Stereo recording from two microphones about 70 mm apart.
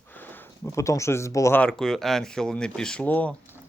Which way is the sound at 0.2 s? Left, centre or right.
Left.